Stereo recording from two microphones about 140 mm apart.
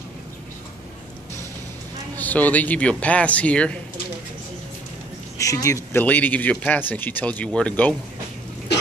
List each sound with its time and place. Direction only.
2.1 s speech: 10° left (ahead or behind)
5.4 s speech: 25° left (ahead or behind)
5.9 s speech: 10° left (ahead or behind)